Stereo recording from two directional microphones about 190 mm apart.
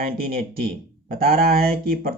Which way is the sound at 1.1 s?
50° right (ahead or behind).